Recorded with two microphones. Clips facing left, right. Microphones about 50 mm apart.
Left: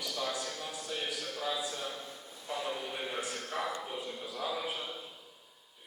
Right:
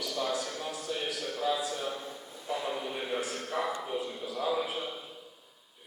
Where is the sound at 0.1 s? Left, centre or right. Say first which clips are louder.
Right 4 dB; centre.